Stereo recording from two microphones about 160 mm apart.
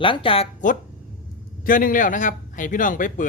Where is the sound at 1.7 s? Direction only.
60° left (ahead or behind).